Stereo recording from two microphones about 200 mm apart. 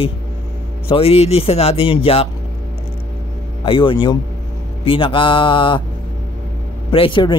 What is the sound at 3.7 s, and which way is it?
A man's voice, 25° left (ahead or behind).